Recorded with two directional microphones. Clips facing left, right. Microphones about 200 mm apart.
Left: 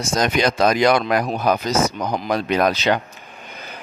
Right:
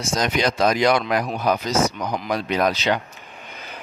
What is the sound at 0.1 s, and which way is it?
Speech, 50° left (ahead or behind).